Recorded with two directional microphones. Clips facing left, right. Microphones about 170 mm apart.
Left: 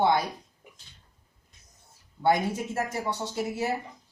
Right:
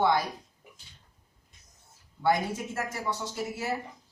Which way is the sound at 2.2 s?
30° left (ahead or behind).